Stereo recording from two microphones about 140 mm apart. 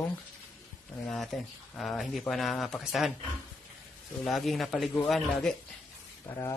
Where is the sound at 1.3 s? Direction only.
Centre (ahead or behind).